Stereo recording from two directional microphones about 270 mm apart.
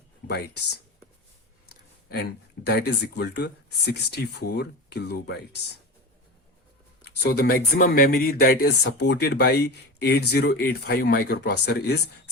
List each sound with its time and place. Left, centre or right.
1.7 s speech: left
7.2 s speech: left